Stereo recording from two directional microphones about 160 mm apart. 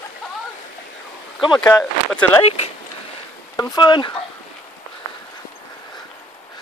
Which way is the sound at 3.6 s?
25° left (ahead or behind).